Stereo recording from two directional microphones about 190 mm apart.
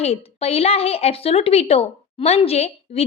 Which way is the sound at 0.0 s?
30° left (ahead or behind).